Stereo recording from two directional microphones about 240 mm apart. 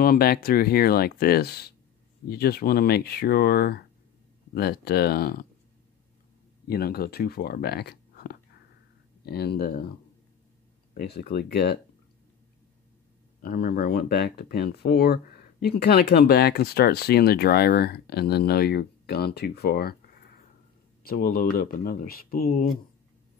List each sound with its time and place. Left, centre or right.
0.0 s speech: left
6.7 s speech: left
11.0 s speech: left
13.4 s speech: left
21.0 s speech: left